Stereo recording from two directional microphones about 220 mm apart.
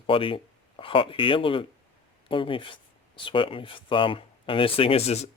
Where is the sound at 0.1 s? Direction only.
25° left (ahead or behind).